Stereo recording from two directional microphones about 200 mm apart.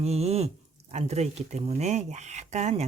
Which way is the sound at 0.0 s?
30° right (ahead or behind).